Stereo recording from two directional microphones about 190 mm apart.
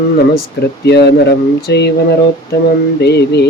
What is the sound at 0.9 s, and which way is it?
Speech, 60° left (ahead or behind).